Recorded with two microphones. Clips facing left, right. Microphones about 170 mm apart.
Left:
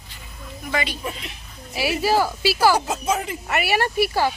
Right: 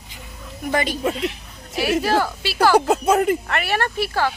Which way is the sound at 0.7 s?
50° right (ahead or behind).